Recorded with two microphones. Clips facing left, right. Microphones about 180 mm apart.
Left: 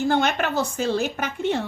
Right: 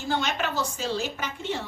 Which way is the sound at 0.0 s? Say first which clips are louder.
Left 6 dB; 55° left (ahead or behind).